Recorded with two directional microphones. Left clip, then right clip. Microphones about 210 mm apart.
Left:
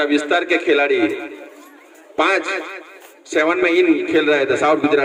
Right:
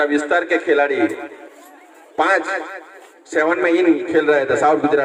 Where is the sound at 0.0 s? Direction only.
35° left (ahead or behind).